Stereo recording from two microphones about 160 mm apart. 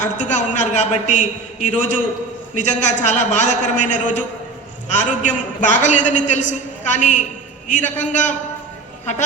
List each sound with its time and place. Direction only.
0.0 s a man's voice: 50° left (ahead or behind)